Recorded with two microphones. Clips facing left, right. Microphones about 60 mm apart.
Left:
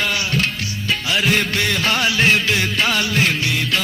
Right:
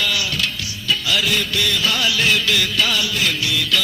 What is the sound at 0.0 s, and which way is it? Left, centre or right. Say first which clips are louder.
Music: left 2 dB; left.